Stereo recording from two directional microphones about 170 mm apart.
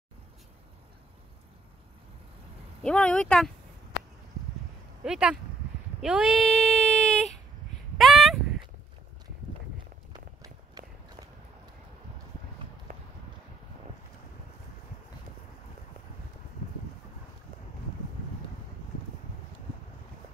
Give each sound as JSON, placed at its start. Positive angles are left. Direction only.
{"t": 2.8, "sound": "speech", "side_deg": 5}
{"t": 5.0, "sound": "speech", "side_deg": -5}
{"t": 5.9, "sound": "a sound", "side_deg": -5}
{"t": 10.1, "sound": "run", "side_deg": -20}